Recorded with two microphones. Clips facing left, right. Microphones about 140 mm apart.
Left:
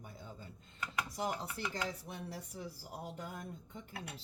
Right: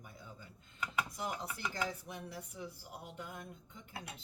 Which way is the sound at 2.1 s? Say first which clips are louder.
Left 1 dB; 35° left (ahead or behind).